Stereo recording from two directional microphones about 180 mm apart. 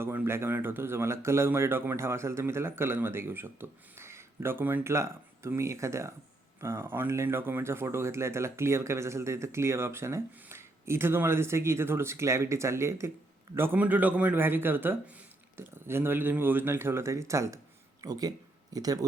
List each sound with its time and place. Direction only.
0.0 s speech: 15° right (ahead or behind)